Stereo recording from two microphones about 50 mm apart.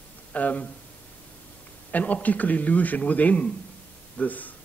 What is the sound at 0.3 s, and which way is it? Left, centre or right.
Speech, left.